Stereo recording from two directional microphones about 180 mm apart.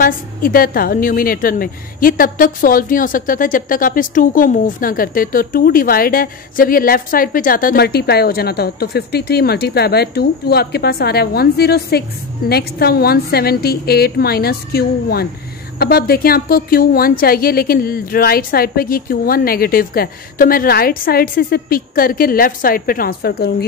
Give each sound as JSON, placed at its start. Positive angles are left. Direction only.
{"t": 0.0, "sound": "a woman's voice", "side_deg": 50}